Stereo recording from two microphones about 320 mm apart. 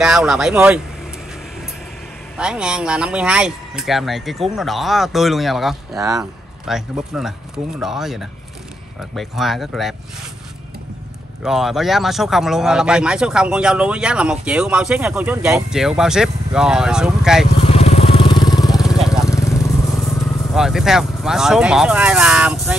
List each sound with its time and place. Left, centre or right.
0.0 s speech: centre
2.3 s speech: centre
5.9 s a man's voice: centre
11.4 s speech: centre
17.6 s vehicle: centre
18.7 s vehicle: centre
19.2 s vehicle: centre
20.2 s speech: centre